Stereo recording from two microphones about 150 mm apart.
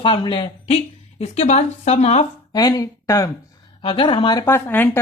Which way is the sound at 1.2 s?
45° left (ahead or behind).